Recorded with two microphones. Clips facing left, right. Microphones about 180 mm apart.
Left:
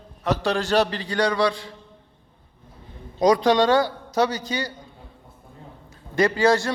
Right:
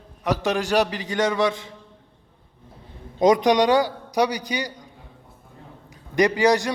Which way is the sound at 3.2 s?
20° right (ahead or behind).